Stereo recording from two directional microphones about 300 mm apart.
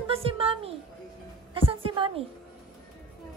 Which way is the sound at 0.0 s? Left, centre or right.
Centre.